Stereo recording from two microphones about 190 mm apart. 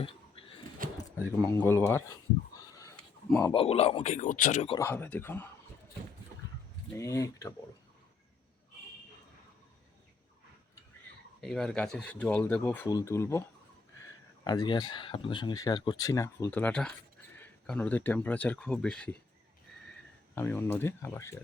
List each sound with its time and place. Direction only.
0.0 s a sound: 30° left (ahead or behind)
1.5 s speech: 10° left (ahead or behind)
2.6 s a sound: 15° left (ahead or behind)
3.2 s speech: 10° left (ahead or behind)
3.5 s speech: 30° left (ahead or behind)
4.8 s speech: 10° left (ahead or behind)
6.9 s speech: 15° left (ahead or behind)
11.3 s speech: 5° left (ahead or behind)
20.3 s speech: 10° left (ahead or behind)